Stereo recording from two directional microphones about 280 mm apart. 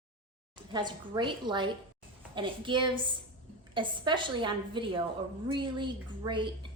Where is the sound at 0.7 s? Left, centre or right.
Centre.